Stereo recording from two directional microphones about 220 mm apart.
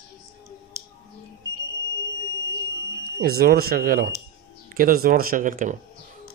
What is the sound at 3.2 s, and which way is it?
Speech, 45° right (ahead or behind).